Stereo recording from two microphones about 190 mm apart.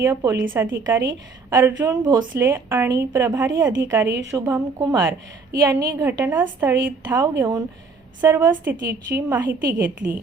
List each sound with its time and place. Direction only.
0.0 s a woman's voice: 15° right (ahead or behind)